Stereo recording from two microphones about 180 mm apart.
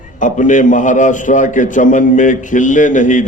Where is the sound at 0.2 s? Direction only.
45° left (ahead or behind).